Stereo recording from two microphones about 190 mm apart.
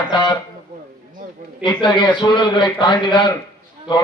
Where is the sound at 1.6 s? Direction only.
25° left (ahead or behind).